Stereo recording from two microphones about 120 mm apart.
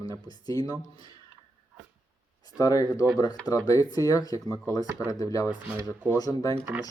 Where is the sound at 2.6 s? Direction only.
30° left (ahead or behind).